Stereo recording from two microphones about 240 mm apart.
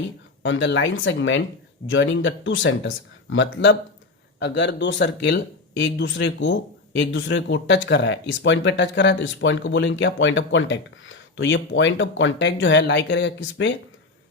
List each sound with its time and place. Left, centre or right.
0.4 s speech: left